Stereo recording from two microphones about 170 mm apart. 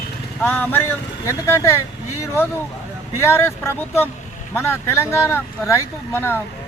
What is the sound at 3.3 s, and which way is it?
Speech, 15° left (ahead or behind).